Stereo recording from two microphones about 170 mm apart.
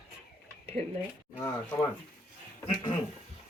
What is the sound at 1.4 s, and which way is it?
Speech, 15° left (ahead or behind).